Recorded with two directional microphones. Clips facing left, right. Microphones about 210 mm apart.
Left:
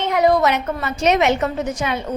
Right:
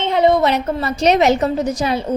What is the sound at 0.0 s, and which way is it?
A woman's voice, 25° right (ahead or behind).